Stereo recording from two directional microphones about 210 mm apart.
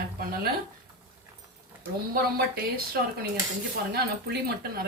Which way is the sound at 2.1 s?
45° right (ahead or behind).